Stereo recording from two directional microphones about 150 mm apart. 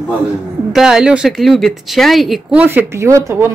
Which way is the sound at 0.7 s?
5° right (ahead or behind).